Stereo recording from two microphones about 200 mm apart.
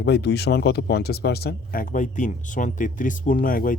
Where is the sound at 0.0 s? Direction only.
55° left (ahead or behind).